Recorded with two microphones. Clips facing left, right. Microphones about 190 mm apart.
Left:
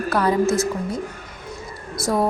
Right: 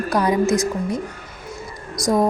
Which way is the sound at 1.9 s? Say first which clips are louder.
Right 3 dB; 15° right (ahead or behind).